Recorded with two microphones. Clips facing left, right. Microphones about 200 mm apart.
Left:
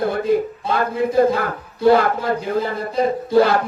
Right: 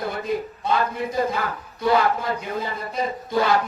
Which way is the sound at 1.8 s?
55° left (ahead or behind).